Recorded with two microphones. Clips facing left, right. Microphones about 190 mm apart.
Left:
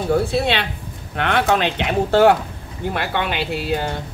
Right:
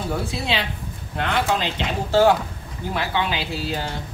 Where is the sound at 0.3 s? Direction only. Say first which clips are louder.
Left 5 dB; 65° left (ahead or behind).